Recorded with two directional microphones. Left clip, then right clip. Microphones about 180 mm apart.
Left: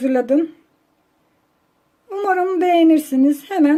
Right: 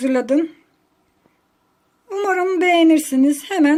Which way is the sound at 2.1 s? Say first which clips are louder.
Even; 5° left (ahead or behind).